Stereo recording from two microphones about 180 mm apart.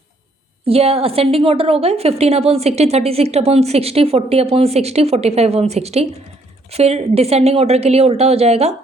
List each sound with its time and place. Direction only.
0.6 s a woman's voice: 35° right (ahead or behind)